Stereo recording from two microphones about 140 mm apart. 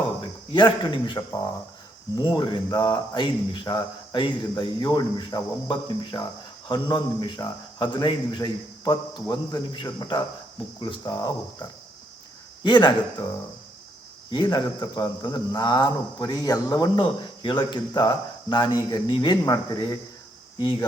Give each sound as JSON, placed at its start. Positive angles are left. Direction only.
{"t": 0.5, "sound": "speech", "side_deg": 35}
{"t": 12.6, "sound": "speech", "side_deg": 35}
{"t": 14.3, "sound": "speech", "side_deg": 35}